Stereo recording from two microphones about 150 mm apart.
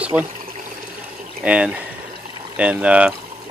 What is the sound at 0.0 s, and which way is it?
Water, 10° right (ahead or behind).